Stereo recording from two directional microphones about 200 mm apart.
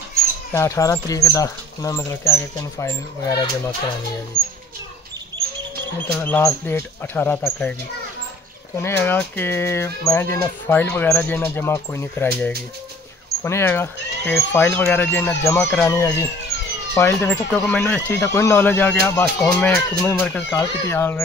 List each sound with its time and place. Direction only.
0.5 s speech: 15° left (ahead or behind)
6.1 s speech: 10° left (ahead or behind)
8.8 s speech: 10° left (ahead or behind)